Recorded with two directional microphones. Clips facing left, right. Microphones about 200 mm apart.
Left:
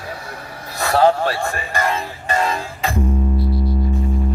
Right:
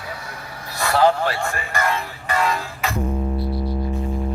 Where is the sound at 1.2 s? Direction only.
35° left (ahead or behind).